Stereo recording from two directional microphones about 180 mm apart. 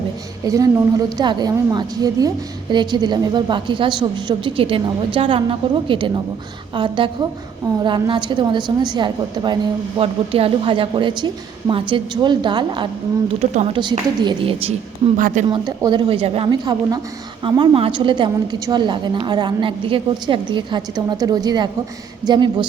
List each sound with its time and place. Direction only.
0.4 s speech: 20° right (ahead or behind)
13.4 s speech: 40° right (ahead or behind)
13.7 s speech: 25° right (ahead or behind)